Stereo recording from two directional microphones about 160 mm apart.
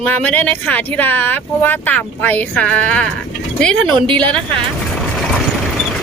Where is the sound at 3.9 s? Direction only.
30° right (ahead or behind).